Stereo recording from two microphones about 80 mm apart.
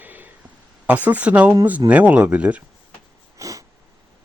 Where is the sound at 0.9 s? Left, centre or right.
Right.